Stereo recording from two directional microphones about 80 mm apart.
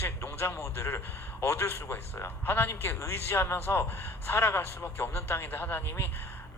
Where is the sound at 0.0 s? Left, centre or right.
Left.